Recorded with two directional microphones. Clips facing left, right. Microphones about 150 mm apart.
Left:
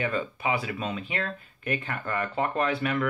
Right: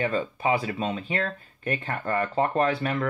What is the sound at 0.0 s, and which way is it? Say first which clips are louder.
Speech: right 3 dB; 30° right (ahead or behind).